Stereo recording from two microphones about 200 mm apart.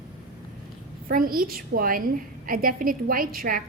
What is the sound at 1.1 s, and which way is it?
A woman's voice, 45° right (ahead or behind).